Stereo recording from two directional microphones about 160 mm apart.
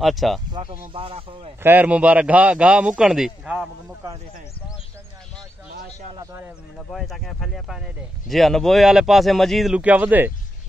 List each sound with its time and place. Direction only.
0.0 s speech: centre (ahead or behind)
0.5 s speech: 35° right (ahead or behind)
1.6 s a man's voice: 10° right (ahead or behind)
6.1 s a man's voice: 15° right (ahead or behind)
6.9 s speech: centre (ahead or behind)